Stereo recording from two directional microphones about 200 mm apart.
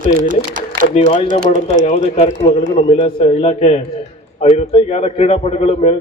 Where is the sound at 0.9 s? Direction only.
25° left (ahead or behind).